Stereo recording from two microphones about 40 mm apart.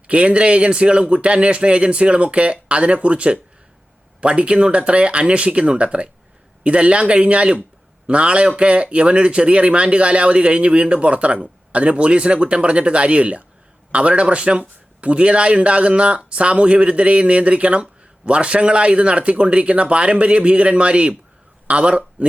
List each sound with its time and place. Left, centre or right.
0.1 s speech: right